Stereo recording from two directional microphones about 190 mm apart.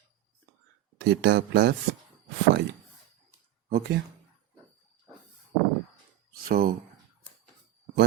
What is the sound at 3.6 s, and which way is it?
Speech, 50° right (ahead or behind).